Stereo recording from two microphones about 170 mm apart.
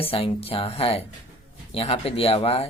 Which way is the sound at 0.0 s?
35° left (ahead or behind).